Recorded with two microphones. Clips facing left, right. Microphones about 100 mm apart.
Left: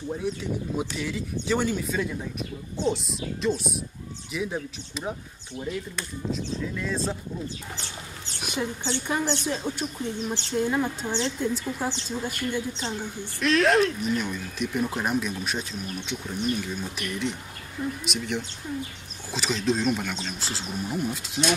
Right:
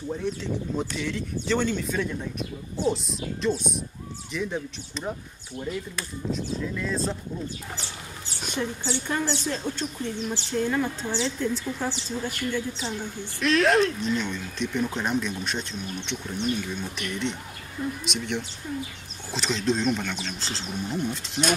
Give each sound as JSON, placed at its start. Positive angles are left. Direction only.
{"t": 0.1, "sound": "speech", "side_deg": 10}
{"t": 8.4, "sound": "a woman's voice", "side_deg": 10}
{"t": 13.4, "sound": "speech", "side_deg": 0}